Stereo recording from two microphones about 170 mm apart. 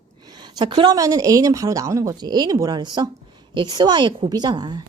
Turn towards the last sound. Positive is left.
turn(degrees=-25)  # may be behind; listen again after turning